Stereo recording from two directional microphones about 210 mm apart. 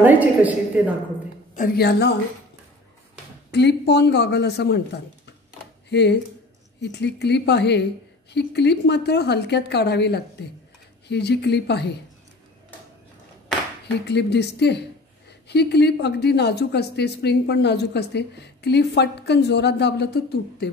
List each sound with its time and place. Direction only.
0.0 s a woman's voice: 10° right (ahead or behind)
1.5 s a woman's voice: 45° left (ahead or behind)
3.5 s a woman's voice: 55° left (ahead or behind)
14.0 s a woman's voice: 55° left (ahead or behind)